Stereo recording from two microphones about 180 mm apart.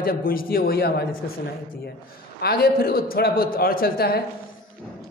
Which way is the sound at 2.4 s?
60° left (ahead or behind).